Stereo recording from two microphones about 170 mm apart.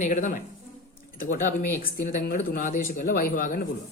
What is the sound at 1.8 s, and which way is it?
Speech, 55° left (ahead or behind).